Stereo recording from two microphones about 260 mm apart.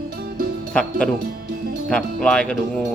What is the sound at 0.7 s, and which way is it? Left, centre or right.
Speech, centre.